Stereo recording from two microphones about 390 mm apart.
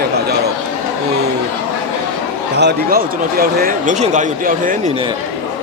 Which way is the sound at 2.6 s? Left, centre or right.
Right.